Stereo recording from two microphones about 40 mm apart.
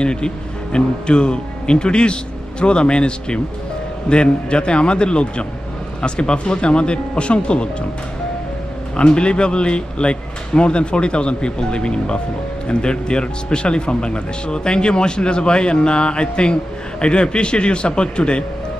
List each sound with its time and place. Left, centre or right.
0.0 s speech: left
8.9 s speech: left